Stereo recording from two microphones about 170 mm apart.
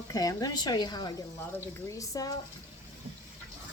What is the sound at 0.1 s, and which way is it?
Speech, 20° left (ahead or behind).